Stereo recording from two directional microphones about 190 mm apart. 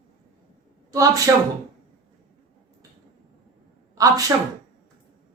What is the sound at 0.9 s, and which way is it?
Speech, 20° right (ahead or behind).